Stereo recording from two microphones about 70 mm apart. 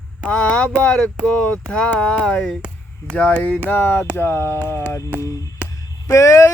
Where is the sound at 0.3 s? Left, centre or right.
Centre.